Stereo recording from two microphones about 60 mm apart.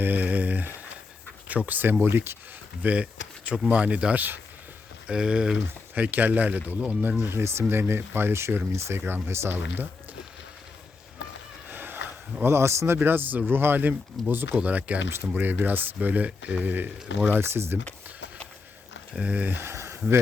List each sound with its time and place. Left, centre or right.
0.0 s a sound: right
1.5 s speech: right
2.8 s speech: right
5.0 s speech: centre
5.9 s speech: right
7.3 s speech: right
11.7 s fowl: right
12.4 s speech: right
13.0 s speech: right
17.2 s speech: right
19.1 s speech: right
19.5 s a sound: right